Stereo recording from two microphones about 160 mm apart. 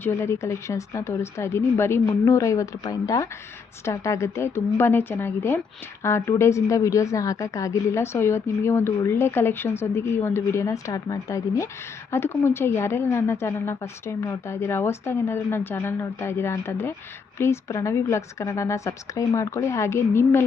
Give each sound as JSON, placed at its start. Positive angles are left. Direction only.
{"t": 0.0, "sound": "a woman's voice", "side_deg": 15}